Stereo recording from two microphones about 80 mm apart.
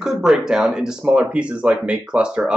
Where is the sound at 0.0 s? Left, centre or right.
Centre.